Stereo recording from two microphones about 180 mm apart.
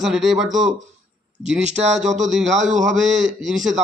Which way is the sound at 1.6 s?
40° right (ahead or behind).